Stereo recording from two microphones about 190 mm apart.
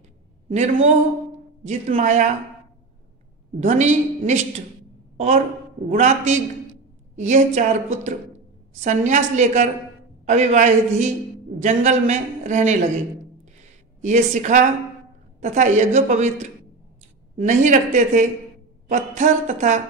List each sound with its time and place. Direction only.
0.5 s a man's voice: 40° right (ahead or behind)
3.5 s a man's voice: 40° right (ahead or behind)
14.0 s a man's voice: 40° right (ahead or behind)